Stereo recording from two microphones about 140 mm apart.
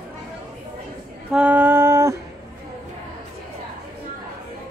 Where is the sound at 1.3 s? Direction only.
10° right (ahead or behind).